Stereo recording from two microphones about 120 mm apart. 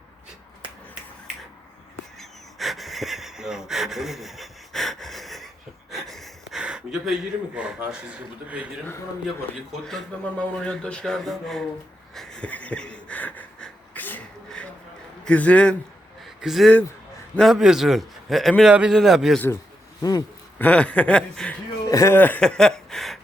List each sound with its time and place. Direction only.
2.1 s a sound: centre (ahead or behind)
5.9 s speech: centre (ahead or behind)
10.7 s a man's voice: 10° left (ahead or behind)
12.1 s wheeze: 5° left (ahead or behind)
15.2 s a man's voice: 10° left (ahead or behind)
16.4 s a man's voice: centre (ahead or behind)
20.0 s speech: 35° left (ahead or behind)
20.6 s a sound: 10° left (ahead or behind)
21.8 s speech: 25° left (ahead or behind); by 23.2 s centre (ahead or behind)